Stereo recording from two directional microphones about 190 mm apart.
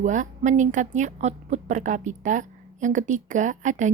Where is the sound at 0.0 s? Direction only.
40° right (ahead or behind).